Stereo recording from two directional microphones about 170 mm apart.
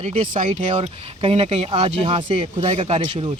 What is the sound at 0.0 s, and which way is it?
Speech, 35° right (ahead or behind).